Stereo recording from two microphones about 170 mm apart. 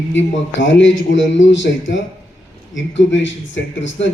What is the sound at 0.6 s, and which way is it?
Speech, 90° left.